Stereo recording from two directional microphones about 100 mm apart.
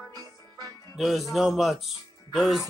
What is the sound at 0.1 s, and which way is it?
Music, 40° right (ahead or behind).